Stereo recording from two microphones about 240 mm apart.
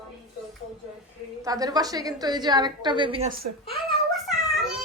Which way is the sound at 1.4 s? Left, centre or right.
Centre.